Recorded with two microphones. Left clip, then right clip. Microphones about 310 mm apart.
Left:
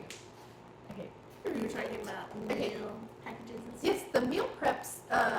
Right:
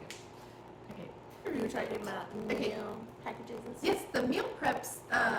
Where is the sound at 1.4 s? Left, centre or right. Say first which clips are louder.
Left 1 dB; centre.